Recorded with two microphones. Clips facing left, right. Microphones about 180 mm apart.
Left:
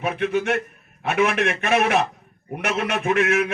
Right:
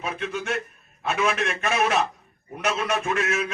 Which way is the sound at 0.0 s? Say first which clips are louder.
Left 7 dB; 65° left (ahead or behind).